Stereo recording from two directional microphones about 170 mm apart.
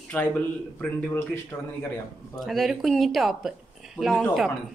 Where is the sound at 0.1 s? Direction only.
10° left (ahead or behind).